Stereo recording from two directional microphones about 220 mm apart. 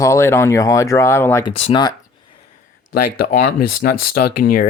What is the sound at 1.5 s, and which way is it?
Speech, 30° left (ahead or behind).